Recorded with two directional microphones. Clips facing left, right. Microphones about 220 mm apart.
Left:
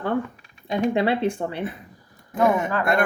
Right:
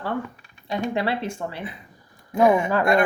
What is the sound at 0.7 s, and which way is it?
Speech, 20° left (ahead or behind).